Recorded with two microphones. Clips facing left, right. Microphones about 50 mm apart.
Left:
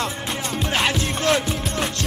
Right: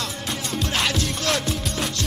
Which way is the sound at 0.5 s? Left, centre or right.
Centre.